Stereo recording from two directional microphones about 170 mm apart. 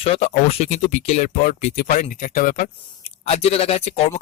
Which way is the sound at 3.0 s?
40° left (ahead or behind).